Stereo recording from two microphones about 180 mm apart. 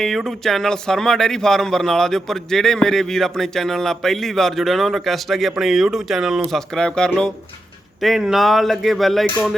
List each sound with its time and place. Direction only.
0.0 s speech: centre (ahead or behind)